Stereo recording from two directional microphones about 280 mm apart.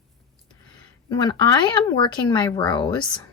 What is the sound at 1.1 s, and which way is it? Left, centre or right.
A woman's voice, centre.